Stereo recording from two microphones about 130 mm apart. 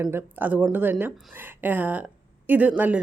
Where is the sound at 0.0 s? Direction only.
20° right (ahead or behind).